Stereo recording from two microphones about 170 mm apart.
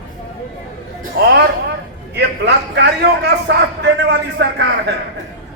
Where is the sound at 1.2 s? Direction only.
70° right (ahead or behind).